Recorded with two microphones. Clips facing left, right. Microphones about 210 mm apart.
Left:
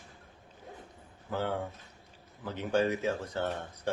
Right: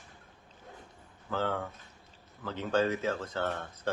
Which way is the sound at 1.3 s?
15° left (ahead or behind).